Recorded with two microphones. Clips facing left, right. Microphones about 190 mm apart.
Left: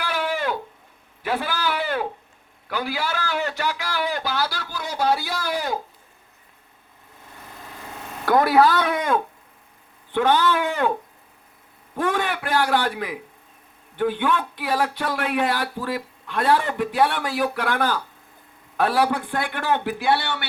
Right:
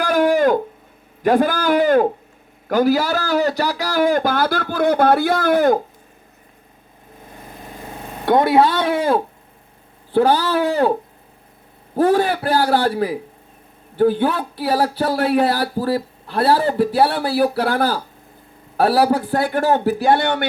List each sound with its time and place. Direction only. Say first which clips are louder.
0.0 s a sound: right 11 dB; 45° right (ahead or behind)
1.2 s a man's voice: right 9 dB; 45° right (ahead or behind)
8.2 s speech: right 3 dB; 25° right (ahead or behind)
11.9 s speech: right 8 dB; 35° right (ahead or behind)